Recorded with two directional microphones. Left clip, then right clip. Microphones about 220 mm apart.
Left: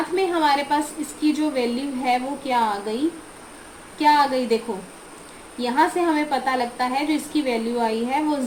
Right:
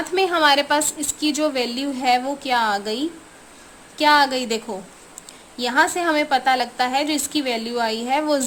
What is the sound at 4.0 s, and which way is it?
Speech, 55° right (ahead or behind).